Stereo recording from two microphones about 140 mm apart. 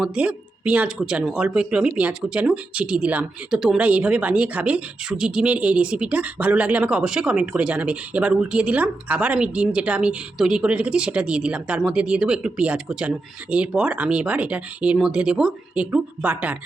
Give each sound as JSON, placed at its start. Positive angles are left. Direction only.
{"t": 0.0, "sound": "speech", "side_deg": -5}